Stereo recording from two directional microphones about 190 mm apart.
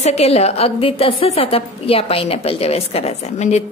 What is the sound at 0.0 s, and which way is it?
A woman's voice, 35° left (ahead or behind).